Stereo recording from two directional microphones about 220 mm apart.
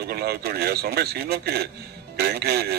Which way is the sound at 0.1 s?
45° right (ahead or behind).